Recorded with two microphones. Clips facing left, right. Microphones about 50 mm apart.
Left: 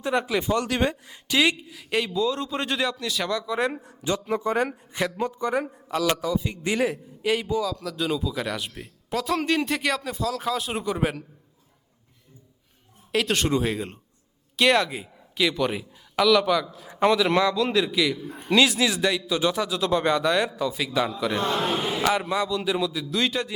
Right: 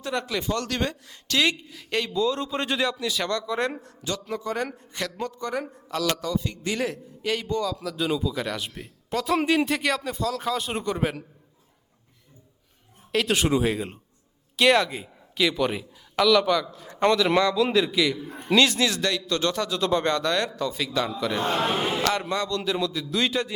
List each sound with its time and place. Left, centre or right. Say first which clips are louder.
0.0 s a woman's voice: left 4 dB; centre
13.1 s a man's voice: right 1 dB; centre
21.4 s a man's voice: right 2 dB; right
22.0 s a man's voice: left 2 dB; centre